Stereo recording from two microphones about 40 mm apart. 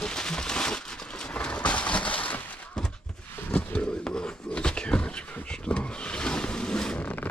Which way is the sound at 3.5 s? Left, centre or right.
Left.